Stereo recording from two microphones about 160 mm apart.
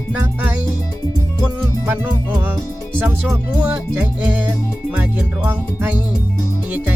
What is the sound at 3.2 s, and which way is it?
Music, 5° right (ahead or behind).